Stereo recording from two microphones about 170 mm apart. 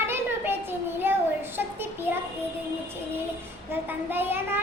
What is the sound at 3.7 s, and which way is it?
Speech, 10° right (ahead or behind).